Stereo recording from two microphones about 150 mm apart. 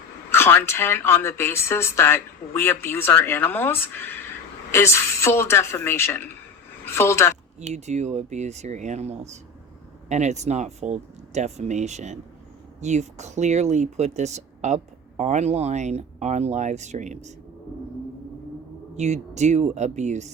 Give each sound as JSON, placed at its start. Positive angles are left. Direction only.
{"t": 0.3, "sound": "a woman's voice", "side_deg": 15}
{"t": 7.6, "sound": "speech", "side_deg": -50}
{"t": 18.9, "sound": "speech", "side_deg": -50}